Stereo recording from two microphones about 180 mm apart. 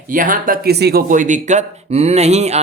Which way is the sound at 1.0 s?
45° right (ahead or behind).